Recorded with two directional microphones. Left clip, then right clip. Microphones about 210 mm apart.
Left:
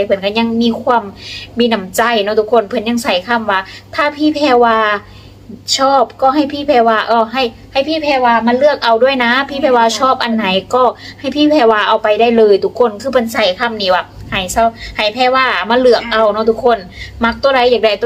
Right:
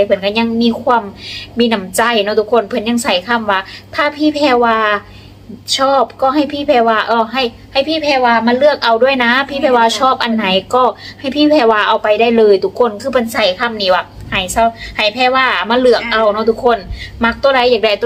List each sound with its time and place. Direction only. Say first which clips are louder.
0.0 s a woman's voice: right 1 dB; centre (ahead or behind)